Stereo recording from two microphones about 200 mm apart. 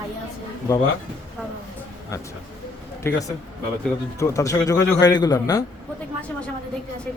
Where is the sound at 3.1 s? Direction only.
10° left (ahead or behind).